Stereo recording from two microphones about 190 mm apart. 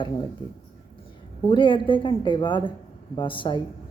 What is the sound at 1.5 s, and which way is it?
Speech, 25° left (ahead or behind).